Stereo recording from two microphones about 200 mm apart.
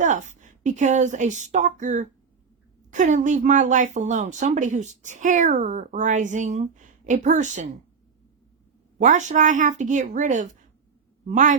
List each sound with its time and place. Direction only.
0.0 s a woman's voice: 40° right (ahead or behind)
9.0 s speech: 40° right (ahead or behind)